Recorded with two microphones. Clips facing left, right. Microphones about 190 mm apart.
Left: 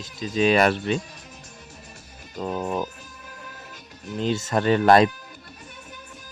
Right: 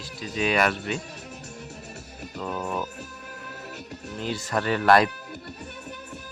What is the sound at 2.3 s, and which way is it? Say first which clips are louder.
Music: left 3 dB; 35° left (ahead or behind).